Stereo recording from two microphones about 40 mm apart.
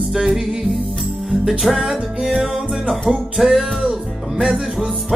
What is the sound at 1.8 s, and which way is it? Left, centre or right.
Music, centre.